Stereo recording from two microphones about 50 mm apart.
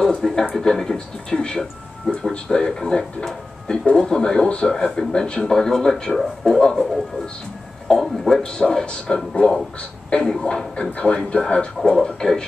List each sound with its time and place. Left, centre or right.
0.2 s speech: centre
7.9 s speech: centre